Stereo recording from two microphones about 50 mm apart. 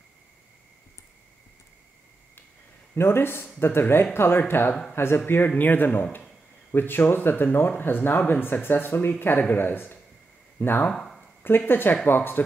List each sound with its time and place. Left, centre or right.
2.9 s speech: left
3.8 s speech: left
4.1 s speech: left
5.6 s speech: left
10.9 s a sound: centre
11.4 s speech: left